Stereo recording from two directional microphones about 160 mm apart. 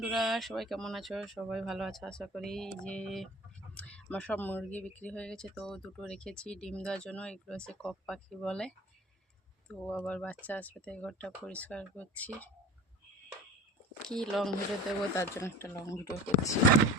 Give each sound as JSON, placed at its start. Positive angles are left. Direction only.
{"t": 0.0, "sound": "speech", "side_deg": 0}
{"t": 14.1, "sound": "speech", "side_deg": 0}
{"t": 15.1, "sound": "speech", "side_deg": 20}